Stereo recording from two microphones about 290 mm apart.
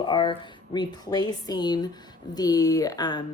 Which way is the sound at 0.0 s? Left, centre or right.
Centre.